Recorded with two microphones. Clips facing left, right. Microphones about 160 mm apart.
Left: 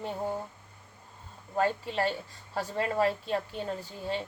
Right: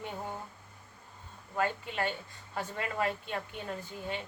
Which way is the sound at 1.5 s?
35° left (ahead or behind).